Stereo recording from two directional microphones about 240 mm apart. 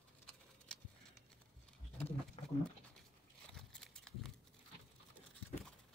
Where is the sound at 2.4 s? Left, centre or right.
Left.